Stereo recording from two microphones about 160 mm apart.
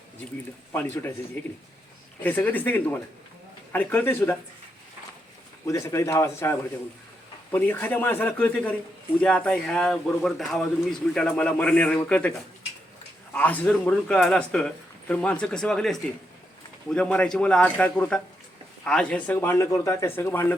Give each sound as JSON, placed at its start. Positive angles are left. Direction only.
{"t": 0.7, "sound": "a man's voice", "side_deg": 15}
{"t": 2.2, "sound": "a man's voice", "side_deg": 10}
{"t": 5.6, "sound": "a man's voice", "side_deg": 20}